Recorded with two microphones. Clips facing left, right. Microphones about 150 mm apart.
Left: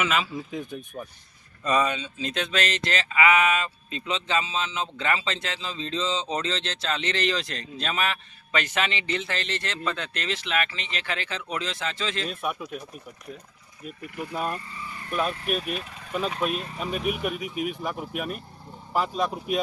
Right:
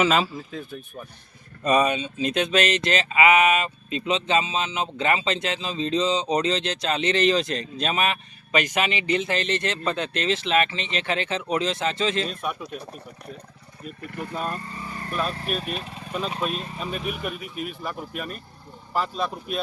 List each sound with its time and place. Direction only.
0.0 s speech: 35° right (ahead or behind)
0.3 s speech: 15° left (ahead or behind)
1.6 s a sound: 20° right (ahead or behind)
12.3 s speech: 5° left (ahead or behind)
14.0 s speech: 55° right (ahead or behind)
14.3 s speech: 10° left (ahead or behind)
14.6 s speech: 45° right (ahead or behind)
15.5 s speech: 30° right (ahead or behind)
16.4 s speech: 10° left (ahead or behind)